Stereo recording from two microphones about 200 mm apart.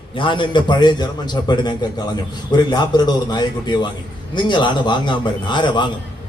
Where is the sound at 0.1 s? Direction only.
25° left (ahead or behind).